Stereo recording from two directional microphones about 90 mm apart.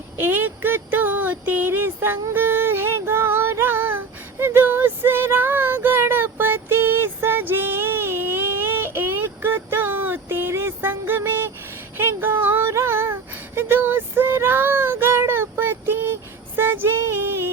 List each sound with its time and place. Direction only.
0.2 s a sound: 20° right (ahead or behind)
2.3 s child singing: 25° right (ahead or behind)
11.9 s female singing: 25° right (ahead or behind)
13.6 s child singing: 25° right (ahead or behind)
16.6 s music: 25° right (ahead or behind)